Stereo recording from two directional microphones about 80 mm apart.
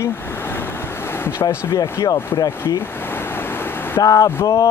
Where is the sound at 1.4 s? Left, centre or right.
Left.